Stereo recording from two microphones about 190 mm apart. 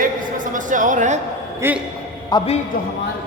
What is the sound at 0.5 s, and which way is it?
Music, 45° right (ahead or behind).